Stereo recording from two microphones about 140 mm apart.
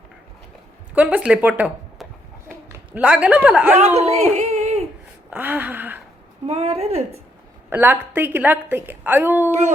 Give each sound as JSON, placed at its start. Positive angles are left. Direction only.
{"t": 0.9, "sound": "a woman's voice", "side_deg": -10}
{"t": 2.0, "sound": "a sound", "side_deg": 0}
{"t": 2.9, "sound": "a woman's voice", "side_deg": -10}
{"t": 3.8, "sound": "speech", "side_deg": -50}
{"t": 5.3, "sound": "a woman's voice", "side_deg": -10}
{"t": 6.5, "sound": "a woman's voice", "side_deg": -50}
{"t": 7.7, "sound": "a woman's voice", "side_deg": -15}
{"t": 9.5, "sound": "a woman's voice", "side_deg": -55}